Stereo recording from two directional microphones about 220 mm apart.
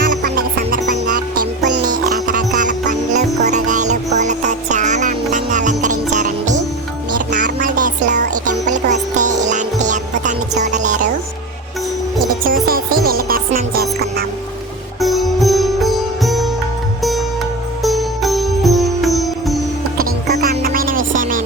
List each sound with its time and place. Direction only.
0.2 s music: 40° right (ahead or behind)
0.9 s music: 50° right (ahead or behind)
1.8 s music: 35° right (ahead or behind)
12.5 s music: 40° right (ahead or behind)
15.0 s sitar: centre (ahead or behind)
17.0 s music: centre (ahead or behind)
20.1 s music: 45° right (ahead or behind)